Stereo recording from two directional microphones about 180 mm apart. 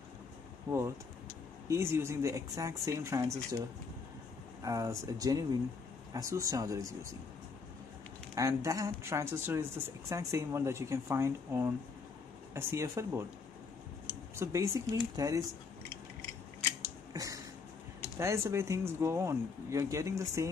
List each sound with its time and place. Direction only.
0.7 s speech: 15° right (ahead or behind)
4.6 s speech: 20° right (ahead or behind)
8.4 s speech: 15° right (ahead or behind)
14.3 s speech: 15° right (ahead or behind)
16.8 s scissors: 20° right (ahead or behind)
18.1 s speech: 15° right (ahead or behind)